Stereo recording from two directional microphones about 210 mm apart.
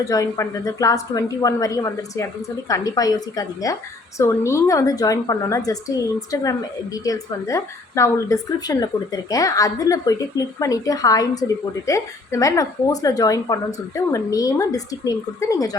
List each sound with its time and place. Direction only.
0.0 s a woman's voice: 15° left (ahead or behind)